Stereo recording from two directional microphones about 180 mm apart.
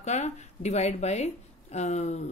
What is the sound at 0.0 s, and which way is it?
Speech, 40° left (ahead or behind).